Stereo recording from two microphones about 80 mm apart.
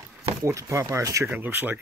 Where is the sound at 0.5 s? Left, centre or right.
Right.